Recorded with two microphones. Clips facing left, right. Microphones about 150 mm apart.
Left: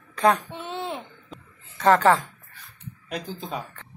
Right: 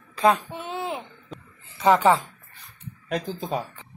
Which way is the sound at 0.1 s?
25° right (ahead or behind).